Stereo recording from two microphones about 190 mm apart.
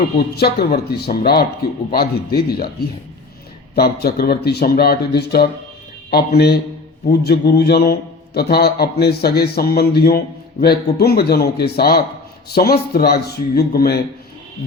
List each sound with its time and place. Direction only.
0.3 s a man's voice: 55° left (ahead or behind)
3.8 s a man's voice: 55° left (ahead or behind)